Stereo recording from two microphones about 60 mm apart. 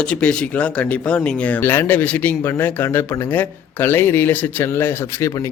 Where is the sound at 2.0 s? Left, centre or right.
Left.